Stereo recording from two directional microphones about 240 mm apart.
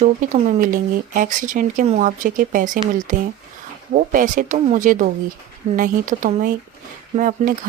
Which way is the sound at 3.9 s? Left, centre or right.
Right.